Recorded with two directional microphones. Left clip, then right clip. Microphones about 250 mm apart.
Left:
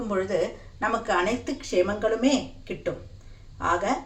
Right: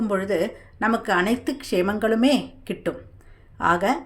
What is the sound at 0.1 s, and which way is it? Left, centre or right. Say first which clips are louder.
A woman's voice: right 1 dB; right.